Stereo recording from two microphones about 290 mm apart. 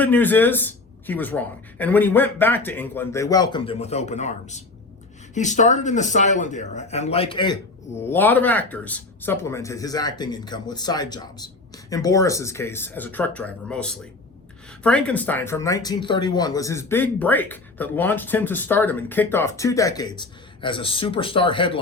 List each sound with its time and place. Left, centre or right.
0.0 s speech: centre